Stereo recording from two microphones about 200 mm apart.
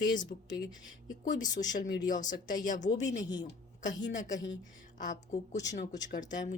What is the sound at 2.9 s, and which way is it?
Speech, 20° left (ahead or behind).